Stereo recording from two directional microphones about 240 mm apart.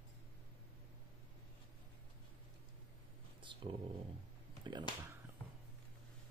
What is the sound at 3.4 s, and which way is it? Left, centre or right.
Dog, centre.